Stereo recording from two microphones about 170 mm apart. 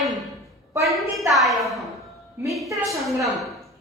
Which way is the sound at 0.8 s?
Centre (ahead or behind).